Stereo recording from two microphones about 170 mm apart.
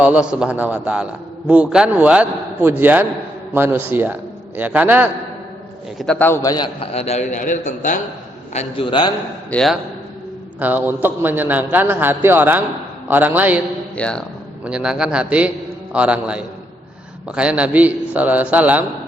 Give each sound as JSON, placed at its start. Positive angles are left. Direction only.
{"t": 0.0, "sound": "a man's voice", "side_deg": -5}
{"t": 6.0, "sound": "a man's voice", "side_deg": 5}
{"t": 6.7, "sound": "a man's voice", "side_deg": 35}
{"t": 8.5, "sound": "a man's voice", "side_deg": 30}
{"t": 9.5, "sound": "speech", "side_deg": 5}
{"t": 10.6, "sound": "a man's voice", "side_deg": -10}
{"t": 13.9, "sound": "speech", "side_deg": 5}
{"t": 14.6, "sound": "a man's voice", "side_deg": -5}